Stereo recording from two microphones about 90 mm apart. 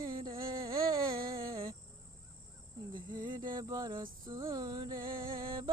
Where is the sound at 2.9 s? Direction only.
55° right (ahead or behind).